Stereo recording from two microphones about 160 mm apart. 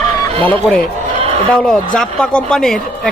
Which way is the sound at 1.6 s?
5° left (ahead or behind).